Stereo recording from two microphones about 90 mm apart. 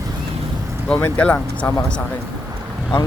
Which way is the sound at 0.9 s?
20° left (ahead or behind).